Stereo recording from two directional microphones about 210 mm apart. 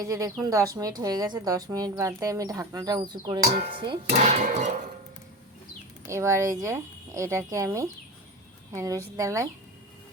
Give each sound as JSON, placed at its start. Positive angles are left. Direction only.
{"t": 0.0, "sound": "speech", "side_deg": -15}
{"t": 3.4, "sound": "speech", "side_deg": -30}
{"t": 6.1, "sound": "speech", "side_deg": -15}